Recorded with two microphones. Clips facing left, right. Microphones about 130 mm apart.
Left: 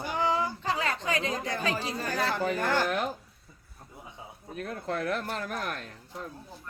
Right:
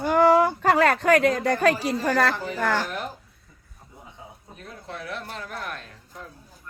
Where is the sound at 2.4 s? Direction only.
50° left (ahead or behind).